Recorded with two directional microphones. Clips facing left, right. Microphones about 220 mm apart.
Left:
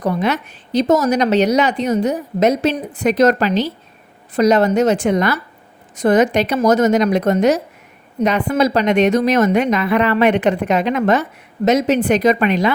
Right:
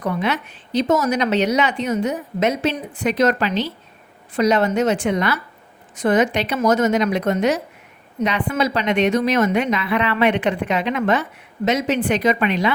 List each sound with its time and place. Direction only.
0.0 s a woman's voice: 40° left (ahead or behind)